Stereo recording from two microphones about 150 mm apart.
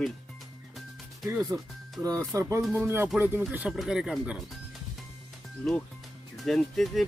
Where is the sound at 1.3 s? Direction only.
20° right (ahead or behind); by 4.3 s 5° right (ahead or behind).